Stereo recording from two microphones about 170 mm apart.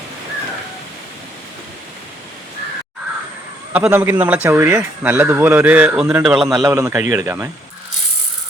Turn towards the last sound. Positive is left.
turn(degrees=-20)  # may be behind; listen again after turning